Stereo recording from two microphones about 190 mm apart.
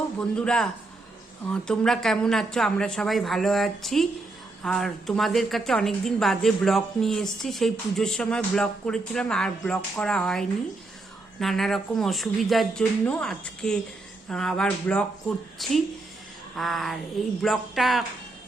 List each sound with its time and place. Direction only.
0.2 s a woman's voice: 5° left (ahead or behind)